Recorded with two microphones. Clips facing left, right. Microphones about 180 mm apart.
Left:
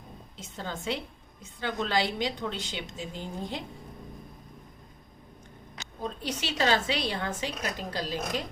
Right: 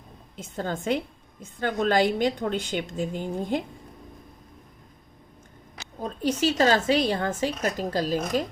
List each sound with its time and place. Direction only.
0.3 s a woman's voice: 50° right (ahead or behind)
6.0 s a woman's voice: 45° right (ahead or behind)